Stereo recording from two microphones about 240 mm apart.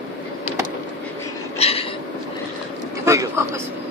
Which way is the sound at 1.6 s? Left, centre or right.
Left.